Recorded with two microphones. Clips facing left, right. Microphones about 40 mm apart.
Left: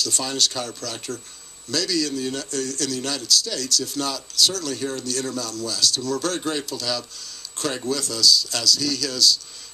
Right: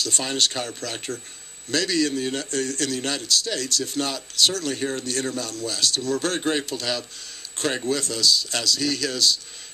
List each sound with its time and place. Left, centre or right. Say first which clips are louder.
0.0 s a man's voice: even; right